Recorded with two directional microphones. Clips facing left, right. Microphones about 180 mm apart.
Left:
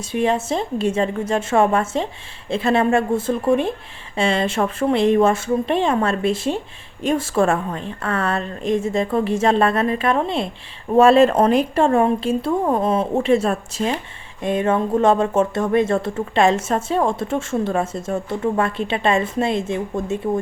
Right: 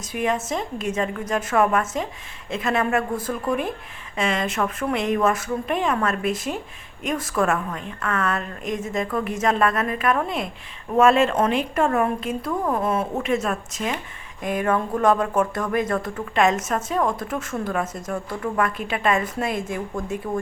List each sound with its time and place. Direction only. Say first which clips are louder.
0.1 s speech: left 4 dB; 30° left (ahead or behind)